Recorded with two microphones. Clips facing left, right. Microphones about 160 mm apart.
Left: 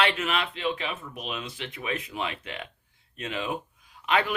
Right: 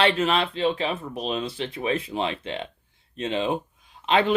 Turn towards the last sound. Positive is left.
turn(degrees=-25)  # may be behind; listen again after turning